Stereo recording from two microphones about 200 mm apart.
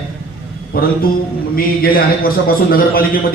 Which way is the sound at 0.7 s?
45° left (ahead or behind).